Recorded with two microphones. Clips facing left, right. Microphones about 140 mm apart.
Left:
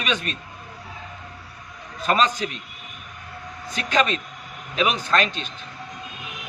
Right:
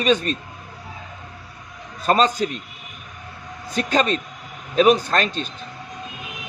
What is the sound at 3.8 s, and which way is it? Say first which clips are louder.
A man's voice: right 2 dB; 35° right (ahead or behind).